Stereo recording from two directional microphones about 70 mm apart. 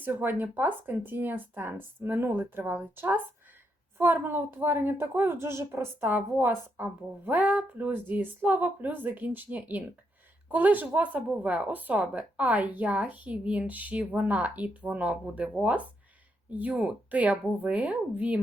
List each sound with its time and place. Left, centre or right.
0.0 s a woman's voice: right
6.1 s a woman's voice: right
16.5 s a woman's voice: right